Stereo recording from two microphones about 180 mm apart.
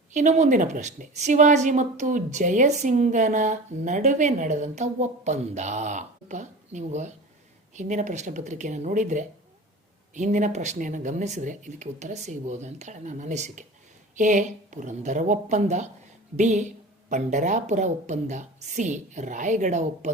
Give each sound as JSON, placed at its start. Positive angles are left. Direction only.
{"t": 0.1, "sound": "speech", "side_deg": -45}